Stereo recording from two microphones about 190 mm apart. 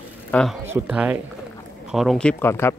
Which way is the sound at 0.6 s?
5° right (ahead or behind).